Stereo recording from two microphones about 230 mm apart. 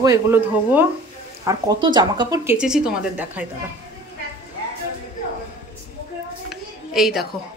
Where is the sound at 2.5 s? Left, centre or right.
Centre.